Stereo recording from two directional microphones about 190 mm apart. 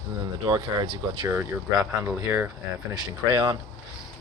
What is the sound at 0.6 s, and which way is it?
Speech, 25° right (ahead or behind).